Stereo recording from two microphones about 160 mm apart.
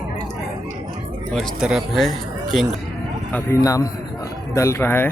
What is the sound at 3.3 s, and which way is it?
Speech, 20° left (ahead or behind).